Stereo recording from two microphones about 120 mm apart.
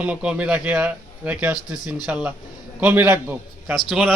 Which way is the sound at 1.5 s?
30° left (ahead or behind).